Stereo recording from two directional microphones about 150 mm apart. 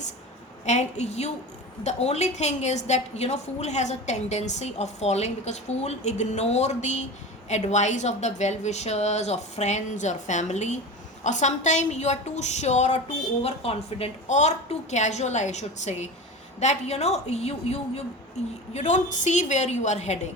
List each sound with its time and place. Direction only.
0.6 s a woman's voice: 50° left (ahead or behind)
13.4 s a woman's voice: 40° left (ahead or behind)